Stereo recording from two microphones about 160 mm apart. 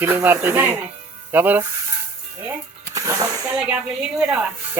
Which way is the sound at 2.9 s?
20° right (ahead or behind).